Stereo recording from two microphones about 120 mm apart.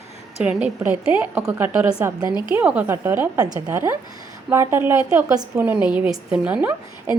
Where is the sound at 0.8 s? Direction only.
20° right (ahead or behind).